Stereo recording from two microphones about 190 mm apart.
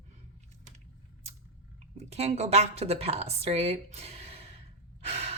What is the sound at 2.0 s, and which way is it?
A woman's voice, 35° right (ahead or behind).